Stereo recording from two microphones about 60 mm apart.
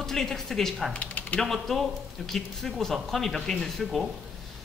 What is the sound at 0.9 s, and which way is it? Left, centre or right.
Mechanisms, left.